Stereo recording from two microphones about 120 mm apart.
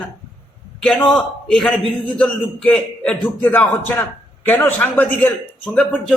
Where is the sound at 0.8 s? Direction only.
5° left (ahead or behind).